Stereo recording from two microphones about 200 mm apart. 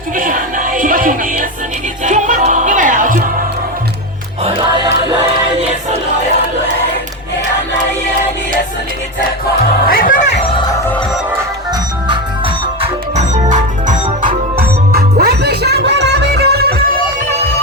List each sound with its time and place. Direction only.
0.2 s music: 40° right (ahead or behind)
4.4 s music: 25° right (ahead or behind)
9.8 s music: 45° left (ahead or behind)
12.8 s music: 35° right (ahead or behind); by 16.9 s 50° right (ahead or behind)